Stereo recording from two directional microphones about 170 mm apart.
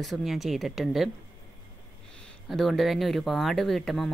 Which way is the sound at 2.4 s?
Centre (ahead or behind).